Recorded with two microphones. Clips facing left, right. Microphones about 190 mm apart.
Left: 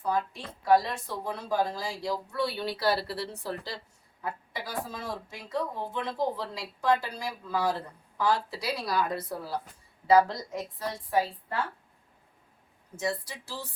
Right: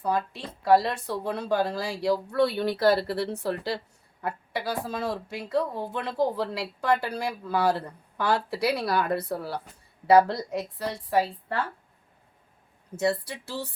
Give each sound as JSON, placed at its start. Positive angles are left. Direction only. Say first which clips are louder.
{"t": 0.6, "sound": "a woman's voice", "louder": "right 3 dB", "side_deg": -70}
{"t": 13.0, "sound": "speech", "louder": "right 6 dB", "side_deg": -65}